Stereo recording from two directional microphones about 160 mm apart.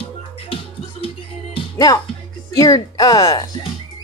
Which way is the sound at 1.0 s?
30° left (ahead or behind).